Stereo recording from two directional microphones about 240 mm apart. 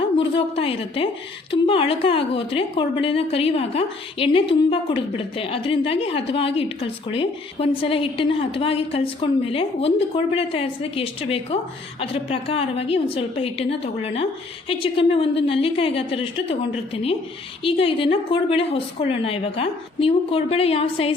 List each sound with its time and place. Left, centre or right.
0.2 s a woman's voice: left